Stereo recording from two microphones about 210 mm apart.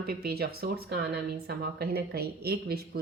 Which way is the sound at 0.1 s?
50° right (ahead or behind).